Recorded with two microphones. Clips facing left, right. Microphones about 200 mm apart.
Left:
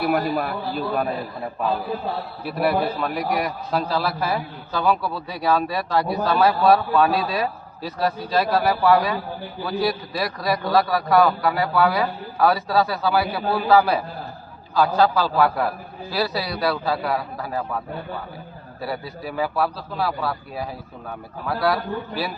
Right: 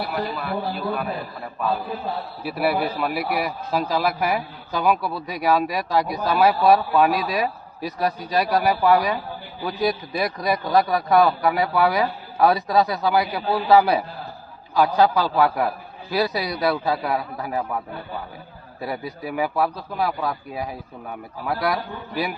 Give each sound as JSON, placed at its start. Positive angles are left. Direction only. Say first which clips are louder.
{"t": 0.1, "sound": "a man's voice", "louder": "left 5 dB", "side_deg": 50}
{"t": 2.4, "sound": "a man's voice", "louder": "left 1 dB", "side_deg": -10}
{"t": 18.8, "sound": "a man's voice", "louder": "right 1 dB", "side_deg": -20}